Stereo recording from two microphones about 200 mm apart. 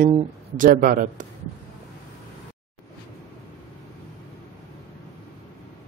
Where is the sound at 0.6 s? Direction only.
45° right (ahead or behind).